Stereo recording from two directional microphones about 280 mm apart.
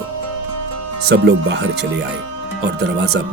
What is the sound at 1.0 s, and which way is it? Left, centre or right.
Speech, right.